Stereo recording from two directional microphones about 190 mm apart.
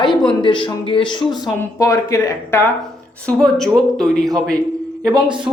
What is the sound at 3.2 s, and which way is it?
Speech, centre (ahead or behind).